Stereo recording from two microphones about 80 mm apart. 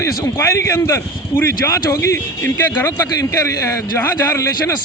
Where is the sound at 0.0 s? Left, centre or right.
Left.